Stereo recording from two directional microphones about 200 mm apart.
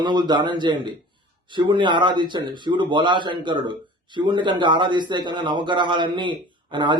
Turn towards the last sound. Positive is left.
turn(degrees=-25)  # may be behind; listen again after turning